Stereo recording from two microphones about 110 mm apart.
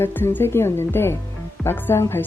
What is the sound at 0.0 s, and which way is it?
Speech, 20° left (ahead or behind).